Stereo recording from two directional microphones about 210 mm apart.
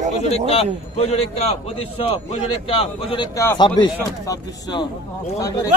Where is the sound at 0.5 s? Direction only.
30° left (ahead or behind).